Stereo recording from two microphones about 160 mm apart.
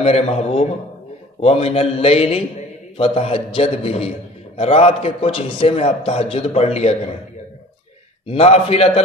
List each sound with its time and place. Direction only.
0.0 s a man's voice: 40° left (ahead or behind)
8.3 s a man's voice: 40° left (ahead or behind)